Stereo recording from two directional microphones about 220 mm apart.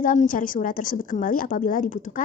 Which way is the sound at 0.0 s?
35° left (ahead or behind).